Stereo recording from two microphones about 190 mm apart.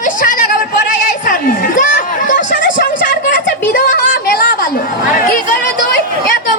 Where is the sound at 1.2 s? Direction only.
45° left (ahead or behind).